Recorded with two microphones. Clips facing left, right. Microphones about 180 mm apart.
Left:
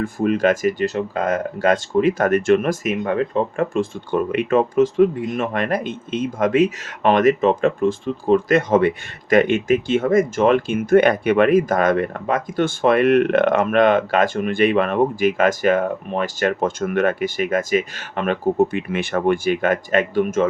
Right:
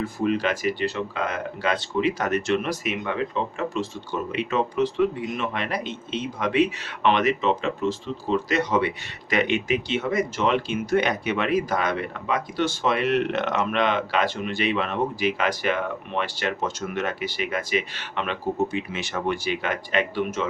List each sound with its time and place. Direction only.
0.0 s speech: 50° left (ahead or behind)